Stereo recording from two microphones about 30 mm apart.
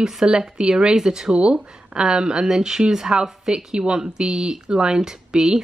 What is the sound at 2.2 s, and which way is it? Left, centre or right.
Speech, centre.